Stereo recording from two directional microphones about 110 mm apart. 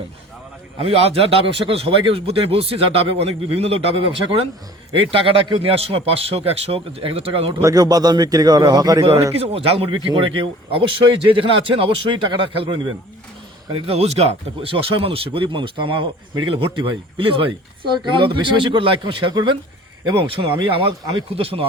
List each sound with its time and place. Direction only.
0.8 s speech: 65° right (ahead or behind)
7.6 s a man's voice: 35° right (ahead or behind)
9.3 s speech: 65° right (ahead or behind); by 12.9 s 45° right (ahead or behind)
13.7 s speech: 60° right (ahead or behind); by 19.5 s 45° right (ahead or behind)
20.2 s speech: 55° right (ahead or behind)